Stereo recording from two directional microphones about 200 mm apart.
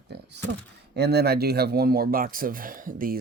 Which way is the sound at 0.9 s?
55° right (ahead or behind).